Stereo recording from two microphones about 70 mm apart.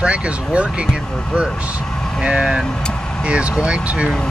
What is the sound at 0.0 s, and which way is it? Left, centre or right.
Speech, centre.